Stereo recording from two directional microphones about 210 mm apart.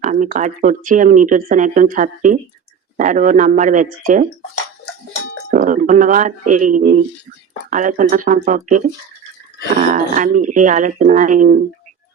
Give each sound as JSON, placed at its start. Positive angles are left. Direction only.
{"t": 0.0, "sound": "speech", "side_deg": -40}
{"t": 5.5, "sound": "speech", "side_deg": -40}
{"t": 9.8, "sound": "speech", "side_deg": -35}